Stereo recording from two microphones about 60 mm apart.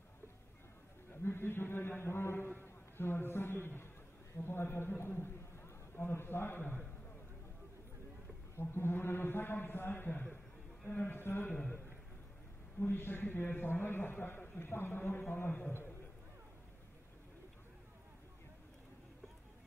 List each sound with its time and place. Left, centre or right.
1.2 s a sound: left
4.5 s a man's voice: left
8.5 s a man's voice: left
12.8 s a man's voice: left